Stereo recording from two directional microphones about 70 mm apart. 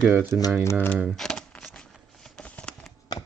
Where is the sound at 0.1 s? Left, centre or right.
Right.